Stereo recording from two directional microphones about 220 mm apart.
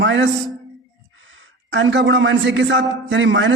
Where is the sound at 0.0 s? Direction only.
60° right (ahead or behind).